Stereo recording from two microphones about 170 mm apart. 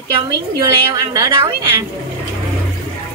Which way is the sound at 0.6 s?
20° right (ahead or behind).